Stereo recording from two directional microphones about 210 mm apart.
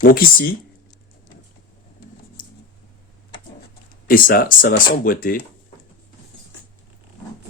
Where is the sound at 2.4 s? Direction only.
40° left (ahead or behind).